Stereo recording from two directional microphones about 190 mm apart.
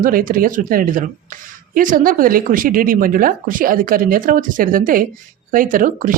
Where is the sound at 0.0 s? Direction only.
50° right (ahead or behind).